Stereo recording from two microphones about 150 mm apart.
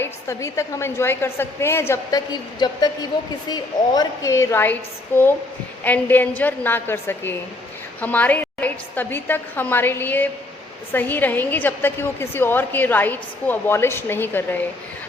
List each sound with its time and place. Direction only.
0.0 s a woman's voice: 20° left (ahead or behind)